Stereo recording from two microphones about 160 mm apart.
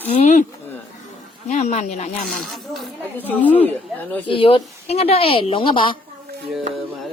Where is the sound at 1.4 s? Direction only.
45° left (ahead or behind).